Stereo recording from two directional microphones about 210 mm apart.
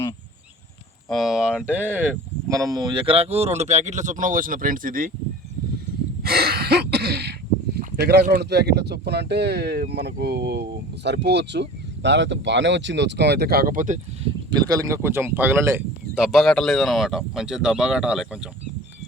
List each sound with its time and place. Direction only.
1.1 s speech: centre (ahead or behind); by 5.1 s 40° right (ahead or behind)
6.2 s a sound: 50° right (ahead or behind)
7.9 s speech: 50° right (ahead or behind)
14.5 s speech: 15° right (ahead or behind)
16.2 s speech: centre (ahead or behind)